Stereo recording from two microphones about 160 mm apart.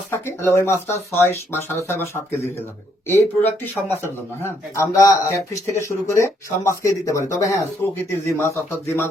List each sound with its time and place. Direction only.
0.1 s speech: 15° left (ahead or behind)